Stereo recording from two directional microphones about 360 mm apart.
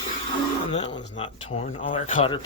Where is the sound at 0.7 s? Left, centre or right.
Centre.